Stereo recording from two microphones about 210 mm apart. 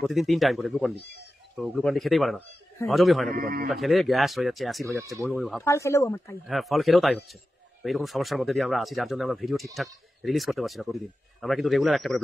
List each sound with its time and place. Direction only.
0.0 s speech: centre (ahead or behind)
0.9 s speech: 55° left (ahead or behind)
1.6 s speech: centre (ahead or behind)
3.3 s speech: 45° right (ahead or behind)
3.6 s speech: centre (ahead or behind)
5.6 s speech: 15° left (ahead or behind)
6.4 s speech: centre (ahead or behind)